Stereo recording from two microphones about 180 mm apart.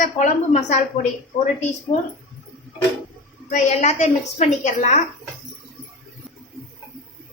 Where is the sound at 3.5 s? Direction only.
40° left (ahead or behind).